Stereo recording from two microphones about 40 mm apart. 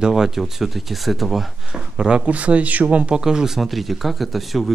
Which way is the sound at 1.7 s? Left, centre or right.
Right.